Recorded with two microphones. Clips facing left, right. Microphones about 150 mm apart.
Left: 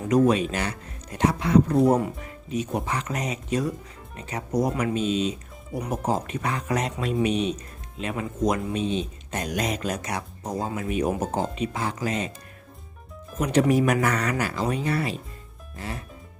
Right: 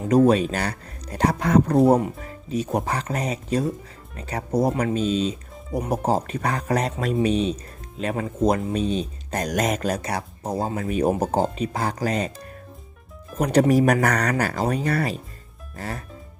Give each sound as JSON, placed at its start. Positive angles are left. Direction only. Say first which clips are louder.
{"t": 0.3, "sound": "speech", "louder": "right 3 dB", "side_deg": -35}
{"t": 1.9, "sound": "speech", "louder": "right 3 dB", "side_deg": -20}
{"t": 2.2, "sound": "speech", "louder": "right 2 dB", "side_deg": -35}
{"t": 13.3, "sound": "speech", "louder": "right 3 dB", "side_deg": -40}